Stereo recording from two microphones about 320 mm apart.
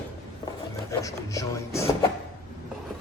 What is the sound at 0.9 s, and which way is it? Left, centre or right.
Speech, centre.